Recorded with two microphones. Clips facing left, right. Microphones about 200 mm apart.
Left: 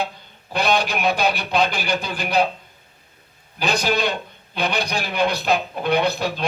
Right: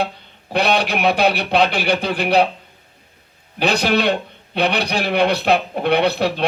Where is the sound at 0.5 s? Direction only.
65° right (ahead or behind).